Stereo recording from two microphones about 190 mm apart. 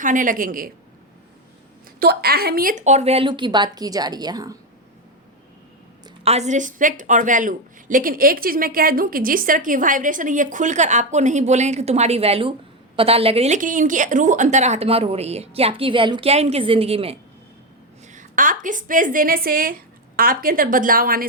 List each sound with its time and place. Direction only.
0.0 s speech: 45° right (ahead or behind)
2.0 s a woman's voice: 55° right (ahead or behind); by 4.5 s 20° right (ahead or behind)
6.2 s a woman's voice: 35° right (ahead or behind)
18.1 s speech: 45° right (ahead or behind)